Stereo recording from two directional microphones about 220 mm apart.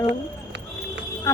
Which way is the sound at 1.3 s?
15° left (ahead or behind).